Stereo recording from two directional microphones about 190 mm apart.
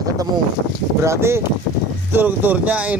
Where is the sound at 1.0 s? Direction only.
15° right (ahead or behind).